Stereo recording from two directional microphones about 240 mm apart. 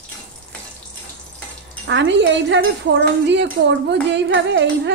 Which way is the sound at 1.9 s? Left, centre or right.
Right.